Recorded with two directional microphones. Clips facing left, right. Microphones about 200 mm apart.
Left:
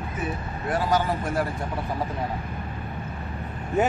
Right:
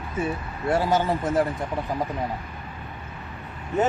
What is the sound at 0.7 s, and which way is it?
Speech, 25° right (ahead or behind).